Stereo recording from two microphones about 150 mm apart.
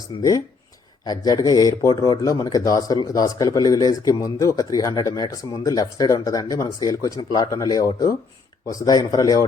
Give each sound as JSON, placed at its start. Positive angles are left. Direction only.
{"t": 0.2, "sound": "speech", "side_deg": 25}